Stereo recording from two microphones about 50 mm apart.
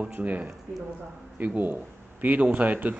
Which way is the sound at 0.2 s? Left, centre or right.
Right.